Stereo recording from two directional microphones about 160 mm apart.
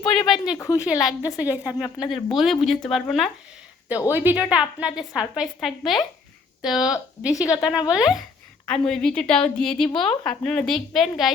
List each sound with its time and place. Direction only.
0.1 s a sound: 5° left (ahead or behind)
0.5 s a woman's voice: 20° left (ahead or behind)
1.4 s a woman's voice: 10° right (ahead or behind)
4.1 s a woman's voice: 10° right (ahead or behind)
7.3 s a woman's voice: 20° left (ahead or behind)
7.9 s a woman's voice: 5° right (ahead or behind)